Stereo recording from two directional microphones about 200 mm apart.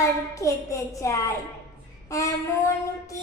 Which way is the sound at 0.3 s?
15° left (ahead or behind).